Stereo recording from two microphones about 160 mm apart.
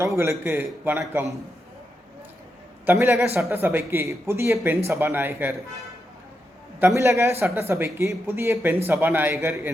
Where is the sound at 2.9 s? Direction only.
15° right (ahead or behind).